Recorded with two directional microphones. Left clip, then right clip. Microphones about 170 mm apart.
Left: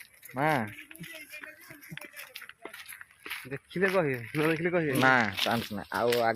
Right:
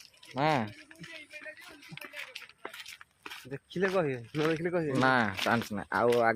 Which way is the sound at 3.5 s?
50° left (ahead or behind).